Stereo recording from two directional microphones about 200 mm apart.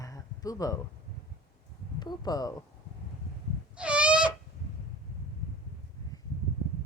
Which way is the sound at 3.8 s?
5° right (ahead or behind).